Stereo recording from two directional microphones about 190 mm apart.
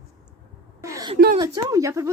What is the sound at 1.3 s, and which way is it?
Speech, 20° right (ahead or behind).